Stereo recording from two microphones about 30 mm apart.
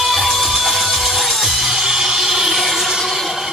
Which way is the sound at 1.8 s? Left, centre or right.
Right.